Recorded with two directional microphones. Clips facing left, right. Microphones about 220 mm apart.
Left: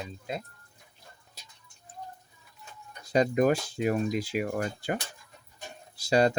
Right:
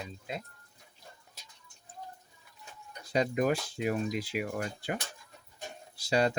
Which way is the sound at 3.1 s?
45° left (ahead or behind).